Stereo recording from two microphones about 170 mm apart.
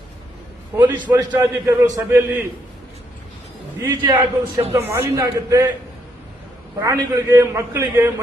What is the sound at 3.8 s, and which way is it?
A man's voice, 20° right (ahead or behind).